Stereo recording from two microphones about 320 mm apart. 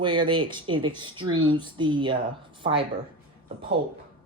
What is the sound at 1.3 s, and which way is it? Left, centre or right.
Speech, right.